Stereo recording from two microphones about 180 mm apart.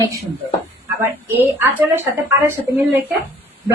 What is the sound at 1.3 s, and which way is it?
Speech, 10° right (ahead or behind).